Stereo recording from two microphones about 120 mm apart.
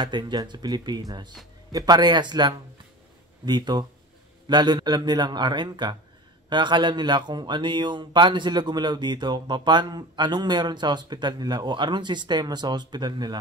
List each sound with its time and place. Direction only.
0.0 s speech: 40° right (ahead or behind)